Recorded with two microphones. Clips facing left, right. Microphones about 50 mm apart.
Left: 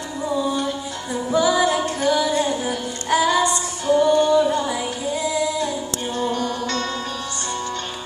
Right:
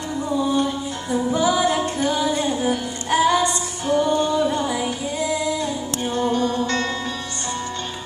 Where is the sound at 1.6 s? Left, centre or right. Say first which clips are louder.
Left 1 dB; right.